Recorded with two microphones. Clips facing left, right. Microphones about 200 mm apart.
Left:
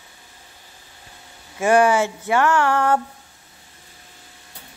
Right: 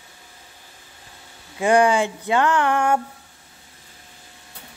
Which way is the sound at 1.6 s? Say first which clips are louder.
Left 1 dB; 15° right (ahead or behind).